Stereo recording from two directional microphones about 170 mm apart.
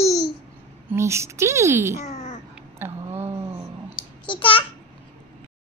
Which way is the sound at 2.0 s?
40° left (ahead or behind).